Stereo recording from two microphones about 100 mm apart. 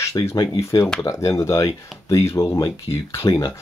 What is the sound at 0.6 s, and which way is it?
Speech, 30° left (ahead or behind).